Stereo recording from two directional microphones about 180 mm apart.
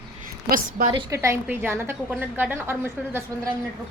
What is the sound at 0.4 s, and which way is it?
Speech, 50° right (ahead or behind).